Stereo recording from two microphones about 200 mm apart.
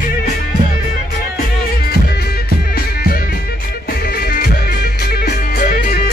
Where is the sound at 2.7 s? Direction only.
50° left (ahead or behind).